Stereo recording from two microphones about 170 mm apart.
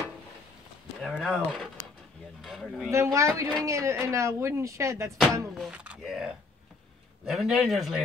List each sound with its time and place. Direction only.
1.0 s speech: 5° left (ahead or behind)
2.4 s a sound: centre (ahead or behind)
2.9 s speech: 15° right (ahead or behind)
5.5 s speech: 5° right (ahead or behind)